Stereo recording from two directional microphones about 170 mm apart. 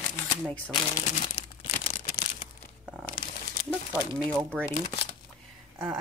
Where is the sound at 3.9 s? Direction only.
10° right (ahead or behind).